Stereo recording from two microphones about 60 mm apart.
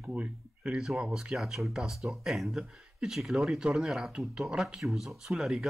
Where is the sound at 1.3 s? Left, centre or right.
Centre.